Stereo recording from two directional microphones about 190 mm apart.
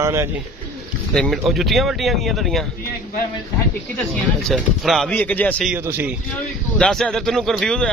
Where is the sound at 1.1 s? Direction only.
Centre (ahead or behind).